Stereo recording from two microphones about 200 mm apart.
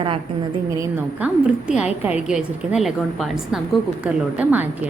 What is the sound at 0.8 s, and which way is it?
A woman's voice, 10° right (ahead or behind).